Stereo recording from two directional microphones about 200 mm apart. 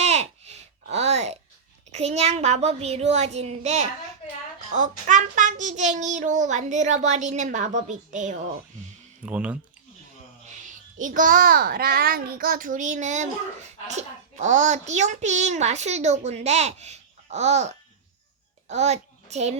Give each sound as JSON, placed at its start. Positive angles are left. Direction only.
{"t": 0.0, "sound": "babbling", "side_deg": -35}
{"t": 1.9, "sound": "a child's voice", "side_deg": -35}
{"t": 9.2, "sound": "speech", "side_deg": -5}
{"t": 10.6, "sound": "a child's voice", "side_deg": -40}